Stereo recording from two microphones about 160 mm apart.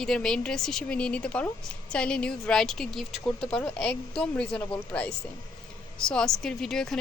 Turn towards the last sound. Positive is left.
turn(degrees=5)  # may be behind; listen again after turning